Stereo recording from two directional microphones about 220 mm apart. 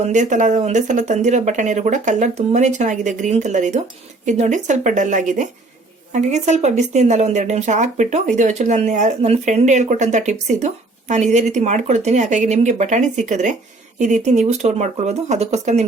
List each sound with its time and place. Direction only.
0.0 s speech: 35° right (ahead or behind)